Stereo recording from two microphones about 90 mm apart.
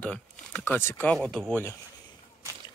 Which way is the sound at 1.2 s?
Centre (ahead or behind).